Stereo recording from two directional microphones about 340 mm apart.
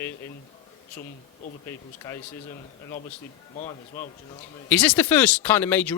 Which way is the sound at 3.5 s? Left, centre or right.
Left.